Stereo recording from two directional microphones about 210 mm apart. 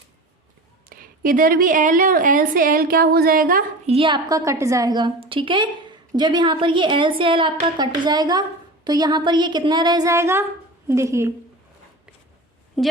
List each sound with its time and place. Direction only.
0.9 s a woman's voice: 45° right (ahead or behind)
3.8 s a woman's voice: 25° right (ahead or behind)
12.8 s a woman's voice: centre (ahead or behind)